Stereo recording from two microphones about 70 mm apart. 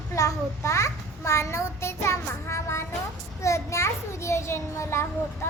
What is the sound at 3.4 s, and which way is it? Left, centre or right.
A child's voice, left.